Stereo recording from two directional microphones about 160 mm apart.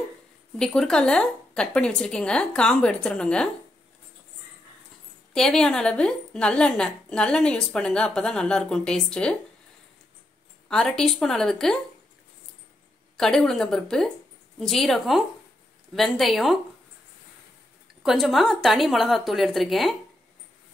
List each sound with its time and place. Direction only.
0.6 s a woman's voice: 5° left (ahead or behind)
5.3 s a woman's voice: 5° left (ahead or behind)
10.7 s a woman's voice: 5° left (ahead or behind)
13.2 s a woman's voice: 5° left (ahead or behind)
18.0 s a woman's voice: centre (ahead or behind)